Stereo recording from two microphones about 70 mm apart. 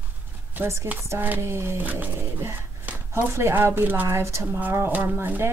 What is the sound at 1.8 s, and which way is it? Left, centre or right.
Speech, right.